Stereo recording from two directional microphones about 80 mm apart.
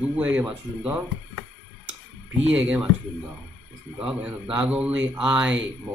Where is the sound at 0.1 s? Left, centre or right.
Centre.